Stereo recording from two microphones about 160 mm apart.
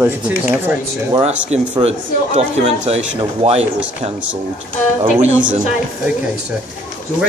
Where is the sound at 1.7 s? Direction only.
40° right (ahead or behind).